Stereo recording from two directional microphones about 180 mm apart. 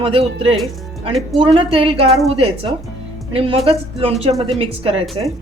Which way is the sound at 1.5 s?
30° right (ahead or behind).